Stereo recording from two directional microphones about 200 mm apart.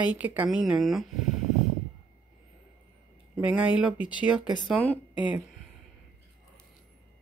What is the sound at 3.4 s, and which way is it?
Speech, 5° right (ahead or behind).